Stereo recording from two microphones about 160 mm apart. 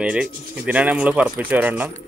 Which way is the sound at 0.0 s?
5° right (ahead or behind).